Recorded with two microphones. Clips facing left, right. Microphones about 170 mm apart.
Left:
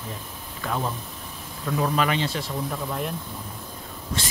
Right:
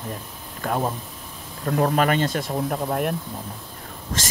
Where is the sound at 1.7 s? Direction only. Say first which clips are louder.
Right 4 dB; 50° right (ahead or behind).